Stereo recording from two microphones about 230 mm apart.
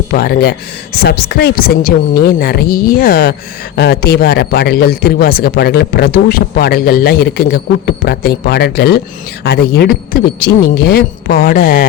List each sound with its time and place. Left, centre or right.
0.1 s a man's voice: left